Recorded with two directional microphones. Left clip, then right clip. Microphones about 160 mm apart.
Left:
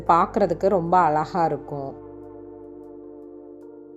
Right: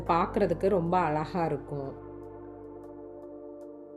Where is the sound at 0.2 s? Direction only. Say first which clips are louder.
Left 7 dB; 10° right (ahead or behind).